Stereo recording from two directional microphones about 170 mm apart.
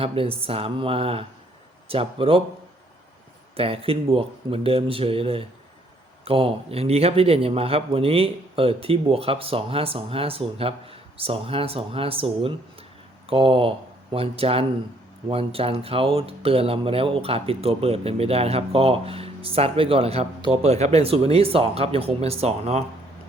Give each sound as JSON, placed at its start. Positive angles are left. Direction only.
{"t": 0.0, "sound": "speech", "side_deg": -35}
{"t": 3.6, "sound": "speech", "side_deg": -35}